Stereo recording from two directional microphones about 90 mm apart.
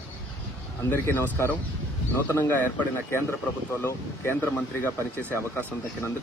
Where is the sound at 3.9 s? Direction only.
25° left (ahead or behind).